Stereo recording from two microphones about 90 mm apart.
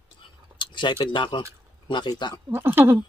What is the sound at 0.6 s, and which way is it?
Speech, 60° left (ahead or behind).